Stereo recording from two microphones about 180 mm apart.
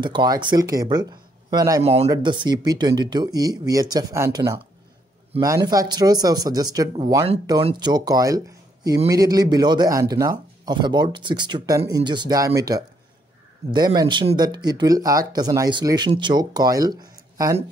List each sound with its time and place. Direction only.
0.0 s a man's voice: 25° right (ahead or behind)
1.8 s speech: 35° right (ahead or behind); by 4.4 s 20° right (ahead or behind)
5.7 s speech: 20° right (ahead or behind)